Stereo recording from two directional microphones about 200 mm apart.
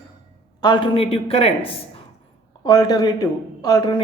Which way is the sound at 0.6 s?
25° left (ahead or behind).